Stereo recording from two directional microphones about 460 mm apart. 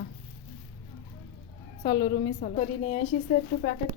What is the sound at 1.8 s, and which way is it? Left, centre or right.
A woman's voice, centre.